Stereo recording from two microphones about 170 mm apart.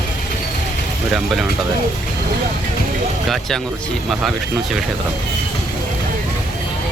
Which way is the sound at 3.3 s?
Centre (ahead or behind).